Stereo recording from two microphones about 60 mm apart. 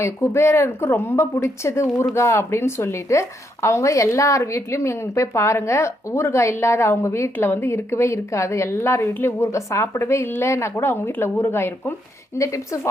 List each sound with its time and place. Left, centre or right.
0.0 s a woman's voice: left
7.3 s a woman's voice: left
12.4 s speech: left